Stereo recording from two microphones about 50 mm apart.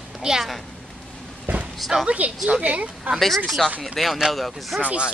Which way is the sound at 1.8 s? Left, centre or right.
Centre.